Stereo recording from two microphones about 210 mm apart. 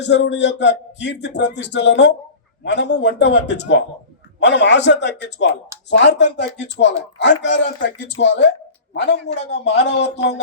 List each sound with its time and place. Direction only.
0.0 s a man's voice: 55° left (ahead or behind)